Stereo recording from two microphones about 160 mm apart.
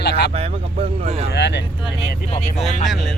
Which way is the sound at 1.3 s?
90° left.